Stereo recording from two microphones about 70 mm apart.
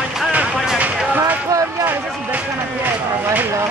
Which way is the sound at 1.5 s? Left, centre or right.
Right.